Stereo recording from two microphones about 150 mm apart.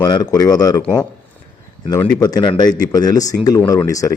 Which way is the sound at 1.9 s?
25° left (ahead or behind).